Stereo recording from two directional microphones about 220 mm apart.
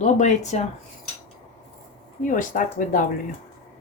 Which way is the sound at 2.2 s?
35° left (ahead or behind).